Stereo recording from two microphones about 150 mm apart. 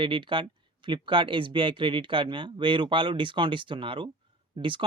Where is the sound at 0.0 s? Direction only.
35° right (ahead or behind).